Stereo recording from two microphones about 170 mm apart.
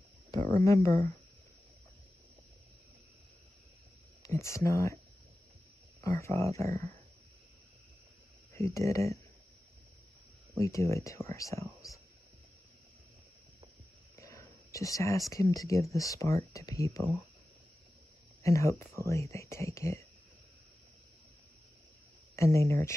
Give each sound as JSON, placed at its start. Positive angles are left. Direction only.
{"t": 0.3, "sound": "speech", "side_deg": 20}
{"t": 4.2, "sound": "speech", "side_deg": 15}
{"t": 5.9, "sound": "speech", "side_deg": 20}
{"t": 8.5, "sound": "speech", "side_deg": 15}
{"t": 10.6, "sound": "speech", "side_deg": 15}
{"t": 14.1, "sound": "a sound", "side_deg": 20}
{"t": 14.7, "sound": "speech", "side_deg": 20}
{"t": 18.4, "sound": "speech", "side_deg": 15}
{"t": 22.3, "sound": "speech", "side_deg": 15}